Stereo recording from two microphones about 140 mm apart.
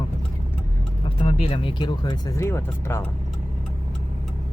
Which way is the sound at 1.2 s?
40° left (ahead or behind).